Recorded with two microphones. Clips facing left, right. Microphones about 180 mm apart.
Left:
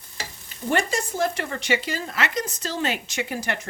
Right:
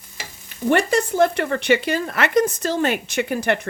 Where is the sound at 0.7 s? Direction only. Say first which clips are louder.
Right 6 dB; 60° right (ahead or behind).